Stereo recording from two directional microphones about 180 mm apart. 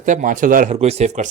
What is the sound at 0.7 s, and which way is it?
Speech, 35° right (ahead or behind).